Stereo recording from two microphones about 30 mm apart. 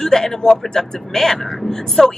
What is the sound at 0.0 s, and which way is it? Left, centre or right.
Speech, centre.